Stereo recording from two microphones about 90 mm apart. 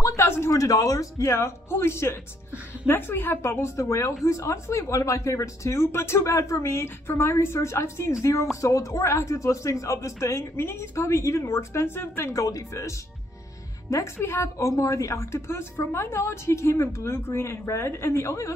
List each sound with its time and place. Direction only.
0.0 s speech: 30° left (ahead or behind)